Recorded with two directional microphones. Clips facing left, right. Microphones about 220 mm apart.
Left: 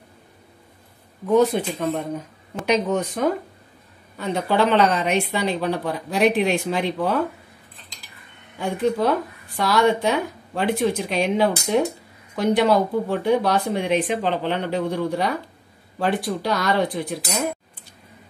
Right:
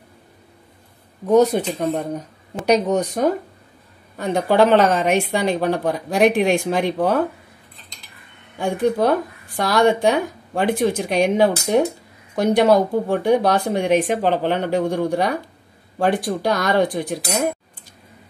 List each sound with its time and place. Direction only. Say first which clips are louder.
1.2 s speech: right 3 dB; 40° right (ahead or behind)
8.5 s speech: right 3 dB; 50° right (ahead or behind)